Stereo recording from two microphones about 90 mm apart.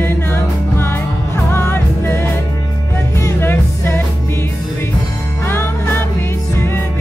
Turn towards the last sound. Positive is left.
turn(degrees=25)  # may be behind; listen again after turning